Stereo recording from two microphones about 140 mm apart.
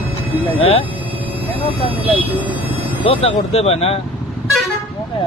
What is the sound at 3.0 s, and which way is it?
Speech, 45° left (ahead or behind).